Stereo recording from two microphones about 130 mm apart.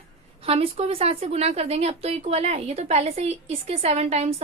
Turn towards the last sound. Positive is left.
turn(degrees=-50)  # may be behind; listen again after turning